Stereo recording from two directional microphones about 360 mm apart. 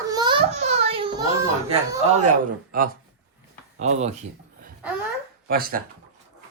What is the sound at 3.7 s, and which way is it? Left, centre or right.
Speech, centre.